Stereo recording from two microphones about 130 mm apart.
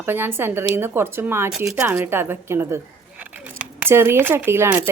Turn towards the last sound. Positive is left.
turn(degrees=-20)  # may be behind; listen again after turning